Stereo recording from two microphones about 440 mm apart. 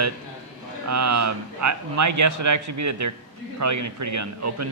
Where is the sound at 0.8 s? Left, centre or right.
Right.